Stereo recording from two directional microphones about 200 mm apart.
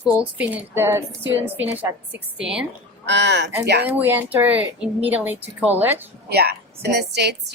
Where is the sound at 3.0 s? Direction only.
60° right (ahead or behind).